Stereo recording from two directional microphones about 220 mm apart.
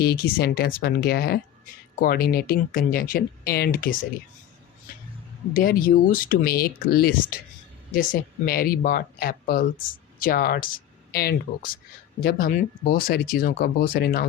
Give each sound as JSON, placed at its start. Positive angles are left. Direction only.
{"t": 0.0, "sound": "speech", "side_deg": 45}
{"t": 5.5, "sound": "speech", "side_deg": 40}